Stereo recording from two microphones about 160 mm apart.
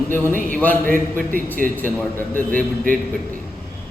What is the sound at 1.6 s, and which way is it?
Speech, 10° left (ahead or behind).